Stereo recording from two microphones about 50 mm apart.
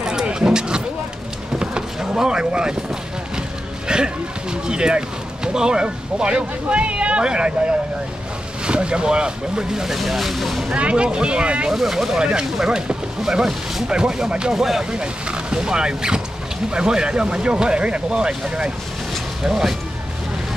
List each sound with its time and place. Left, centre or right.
0.0 s a sound: centre
3.8 s speech: centre
8.6 s speech: centre
10.7 s speech: right
11.7 s speech: centre
19.4 s speech: centre